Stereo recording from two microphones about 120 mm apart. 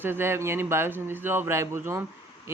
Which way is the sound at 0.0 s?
20° right (ahead or behind).